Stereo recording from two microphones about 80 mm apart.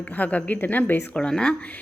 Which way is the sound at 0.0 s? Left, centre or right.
Centre.